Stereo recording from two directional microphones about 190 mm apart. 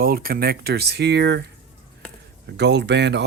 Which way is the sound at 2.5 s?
60° right (ahead or behind).